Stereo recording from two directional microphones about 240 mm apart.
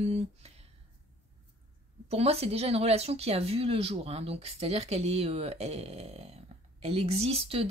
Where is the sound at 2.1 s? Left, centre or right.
Right.